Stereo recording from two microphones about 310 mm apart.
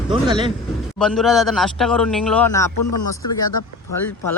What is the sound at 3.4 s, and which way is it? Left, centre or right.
Speech, left.